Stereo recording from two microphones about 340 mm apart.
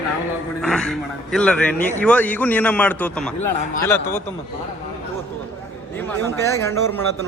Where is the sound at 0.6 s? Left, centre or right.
Centre.